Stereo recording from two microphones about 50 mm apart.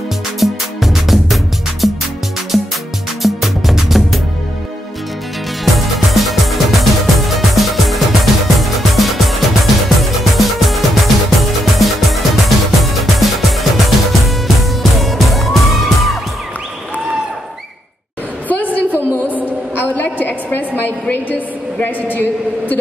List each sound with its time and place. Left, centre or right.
0.4 s music: centre
5.8 s music: centre
19.7 s a sound: left